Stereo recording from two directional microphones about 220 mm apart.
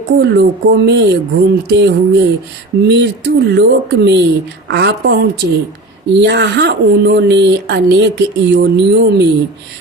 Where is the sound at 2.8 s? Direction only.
50° right (ahead or behind).